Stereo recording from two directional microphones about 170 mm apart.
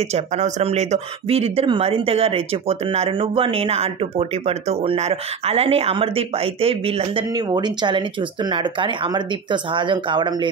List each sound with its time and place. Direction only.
0.1 s speech: 40° right (ahead or behind)